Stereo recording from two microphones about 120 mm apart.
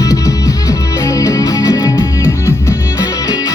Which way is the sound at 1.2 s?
30° left (ahead or behind).